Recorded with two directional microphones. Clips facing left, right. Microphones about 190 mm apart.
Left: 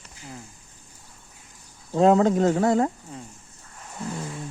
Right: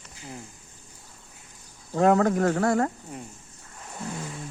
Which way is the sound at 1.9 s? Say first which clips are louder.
Left 3 dB; 20° left (ahead or behind).